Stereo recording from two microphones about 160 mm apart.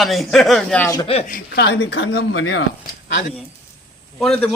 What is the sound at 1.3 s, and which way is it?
A woman's voice, 75° left (ahead or behind).